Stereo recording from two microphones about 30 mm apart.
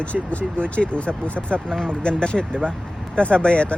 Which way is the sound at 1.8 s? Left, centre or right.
Left.